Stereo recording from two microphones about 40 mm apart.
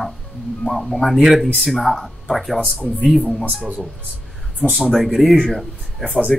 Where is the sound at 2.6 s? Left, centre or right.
Left.